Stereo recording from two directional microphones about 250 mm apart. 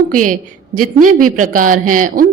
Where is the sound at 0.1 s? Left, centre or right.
Right.